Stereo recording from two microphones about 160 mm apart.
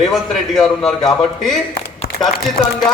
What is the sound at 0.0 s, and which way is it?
A man's voice, centre (ahead or behind).